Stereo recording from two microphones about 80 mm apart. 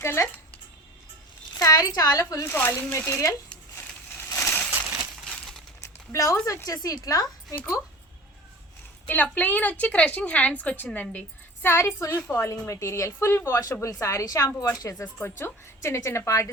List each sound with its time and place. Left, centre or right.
0.0 s speech: left
1.6 s speech: left
2.5 s a woman's voice: left
4.4 s a sound: left
5.2 s crumpling: centre
5.8 s a sound: left
6.7 s speech: left
9.0 s a woman's voice: left
11.7 s a woman's voice: left
13.5 s a woman's voice: left
15.0 s a woman's voice: left